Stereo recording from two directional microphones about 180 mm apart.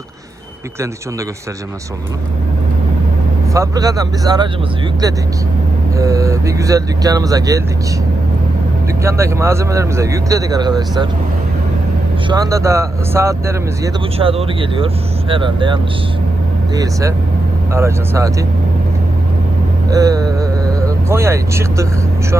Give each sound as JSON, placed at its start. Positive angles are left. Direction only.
{"t": 3.5, "sound": "speech", "side_deg": -20}
{"t": 6.0, "sound": "speech", "side_deg": -15}
{"t": 9.0, "sound": "speech", "side_deg": -15}
{"t": 12.3, "sound": "speech", "side_deg": -20}
{"t": 14.2, "sound": "speech", "side_deg": -30}
{"t": 19.9, "sound": "speech", "side_deg": -20}